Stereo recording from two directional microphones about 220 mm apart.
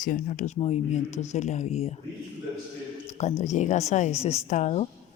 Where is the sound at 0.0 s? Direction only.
40° left (ahead or behind).